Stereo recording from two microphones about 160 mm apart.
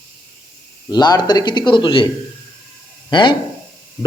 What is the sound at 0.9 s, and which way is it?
A man's voice, 25° left (ahead or behind).